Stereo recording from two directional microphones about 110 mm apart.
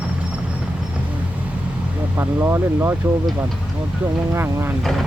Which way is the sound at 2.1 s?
20° right (ahead or behind).